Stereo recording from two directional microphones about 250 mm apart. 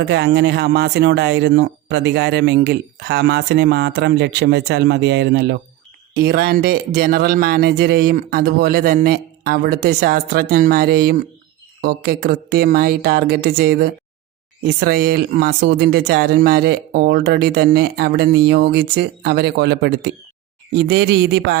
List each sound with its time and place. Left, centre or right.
0.0 s speech: right